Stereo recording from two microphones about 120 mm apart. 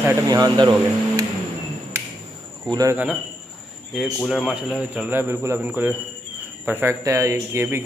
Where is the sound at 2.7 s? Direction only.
30° right (ahead or behind).